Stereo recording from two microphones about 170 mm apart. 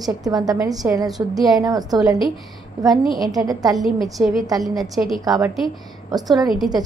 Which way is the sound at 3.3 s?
20° right (ahead or behind).